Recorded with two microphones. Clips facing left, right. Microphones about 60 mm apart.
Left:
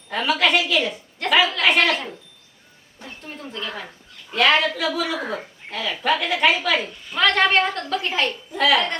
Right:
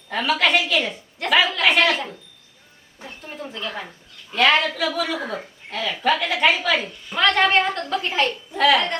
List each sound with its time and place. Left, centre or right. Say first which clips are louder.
0.1 s a woman's voice: even; centre